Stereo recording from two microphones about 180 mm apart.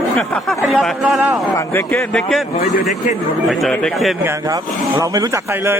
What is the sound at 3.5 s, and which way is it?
Speech, centre (ahead or behind).